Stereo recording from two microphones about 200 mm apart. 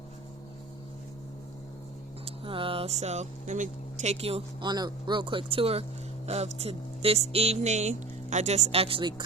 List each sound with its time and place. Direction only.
2.2 s speech: 25° right (ahead or behind)